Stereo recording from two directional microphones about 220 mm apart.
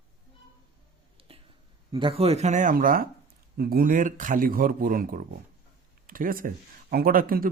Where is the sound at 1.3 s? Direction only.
25° right (ahead or behind).